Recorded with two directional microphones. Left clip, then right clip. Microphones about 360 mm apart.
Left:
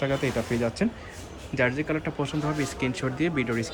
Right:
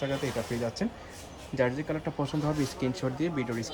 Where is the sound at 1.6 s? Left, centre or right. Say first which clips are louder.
Left 4 dB; centre.